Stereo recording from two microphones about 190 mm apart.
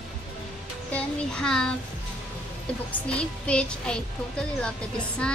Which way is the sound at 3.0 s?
5° left (ahead or behind).